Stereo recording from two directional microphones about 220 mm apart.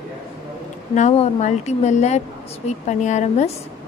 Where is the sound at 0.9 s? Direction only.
30° left (ahead or behind).